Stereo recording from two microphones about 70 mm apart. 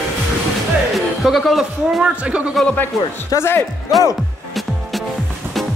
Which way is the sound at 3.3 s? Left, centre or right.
Left.